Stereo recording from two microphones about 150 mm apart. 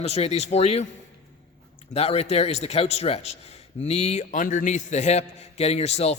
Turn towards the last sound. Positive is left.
turn(degrees=45)  # may be behind; listen again after turning